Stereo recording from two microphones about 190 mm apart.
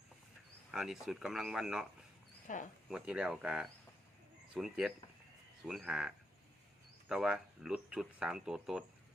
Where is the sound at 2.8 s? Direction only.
5° right (ahead or behind).